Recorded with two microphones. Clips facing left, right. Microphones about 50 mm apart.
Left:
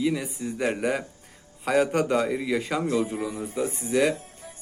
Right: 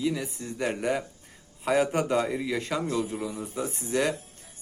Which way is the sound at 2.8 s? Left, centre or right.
Centre.